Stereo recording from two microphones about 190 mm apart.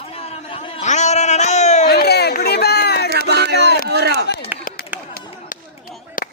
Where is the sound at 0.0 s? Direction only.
30° left (ahead or behind).